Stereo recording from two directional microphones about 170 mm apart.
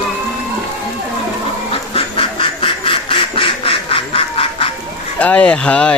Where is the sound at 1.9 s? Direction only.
30° left (ahead or behind).